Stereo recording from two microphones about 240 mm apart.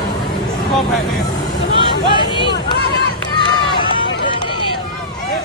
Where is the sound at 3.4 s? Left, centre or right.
Centre.